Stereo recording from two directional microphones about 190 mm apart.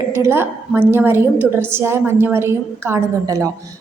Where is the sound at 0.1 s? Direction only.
10° right (ahead or behind).